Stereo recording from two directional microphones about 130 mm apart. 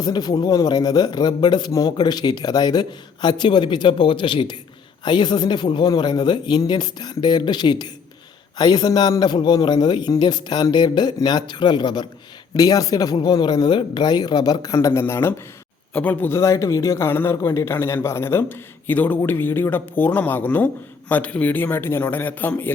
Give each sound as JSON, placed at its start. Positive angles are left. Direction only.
{"t": 0.0, "sound": "a man's voice", "side_deg": 30}